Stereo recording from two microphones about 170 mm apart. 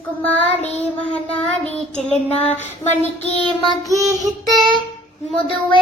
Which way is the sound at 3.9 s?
20° right (ahead or behind).